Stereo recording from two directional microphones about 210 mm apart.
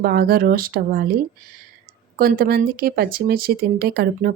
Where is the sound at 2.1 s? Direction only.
45° right (ahead or behind).